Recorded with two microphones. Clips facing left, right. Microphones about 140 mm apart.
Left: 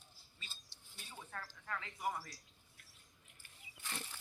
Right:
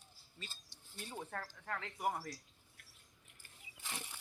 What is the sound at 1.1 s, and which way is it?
Speech, 50° right (ahead or behind).